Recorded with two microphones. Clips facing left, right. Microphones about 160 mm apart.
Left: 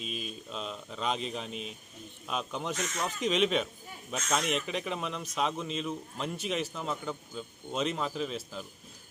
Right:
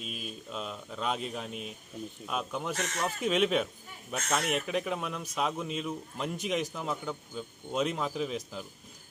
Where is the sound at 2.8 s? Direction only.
65° right (ahead or behind).